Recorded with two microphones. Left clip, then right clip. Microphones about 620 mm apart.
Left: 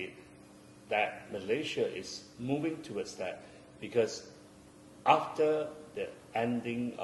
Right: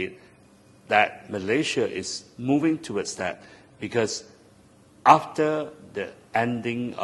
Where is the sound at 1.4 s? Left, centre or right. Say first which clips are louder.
Right 8 dB; right.